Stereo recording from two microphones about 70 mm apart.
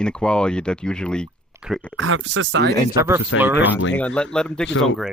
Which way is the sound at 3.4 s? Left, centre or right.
Right.